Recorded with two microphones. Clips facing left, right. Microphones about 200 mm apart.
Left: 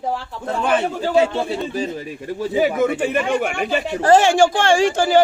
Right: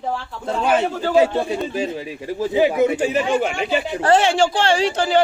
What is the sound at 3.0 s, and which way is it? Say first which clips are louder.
Speech: right 1 dB; 60° left (ahead or behind).